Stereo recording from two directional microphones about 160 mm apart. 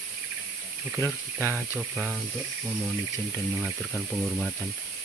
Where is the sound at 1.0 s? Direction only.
20° left (ahead or behind).